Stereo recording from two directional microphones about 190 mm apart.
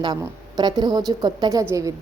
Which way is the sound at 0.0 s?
20° right (ahead or behind).